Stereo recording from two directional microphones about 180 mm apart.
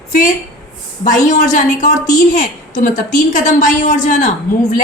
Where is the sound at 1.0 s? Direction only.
45° left (ahead or behind).